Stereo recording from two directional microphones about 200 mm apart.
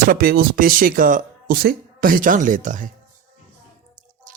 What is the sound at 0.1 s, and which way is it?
Speech, 50° right (ahead or behind).